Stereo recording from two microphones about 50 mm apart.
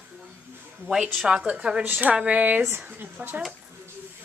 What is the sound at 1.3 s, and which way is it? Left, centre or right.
Speech, right.